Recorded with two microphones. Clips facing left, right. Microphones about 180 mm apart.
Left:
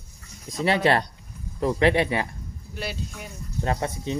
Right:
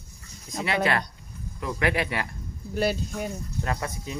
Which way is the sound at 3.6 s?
25° left (ahead or behind).